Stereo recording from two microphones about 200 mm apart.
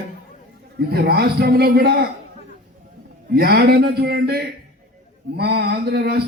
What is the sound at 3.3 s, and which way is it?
A man's voice, 50° right (ahead or behind).